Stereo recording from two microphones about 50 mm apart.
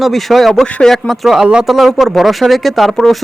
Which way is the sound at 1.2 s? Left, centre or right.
Centre.